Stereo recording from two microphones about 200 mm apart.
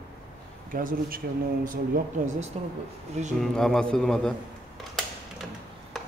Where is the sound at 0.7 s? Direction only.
45° right (ahead or behind).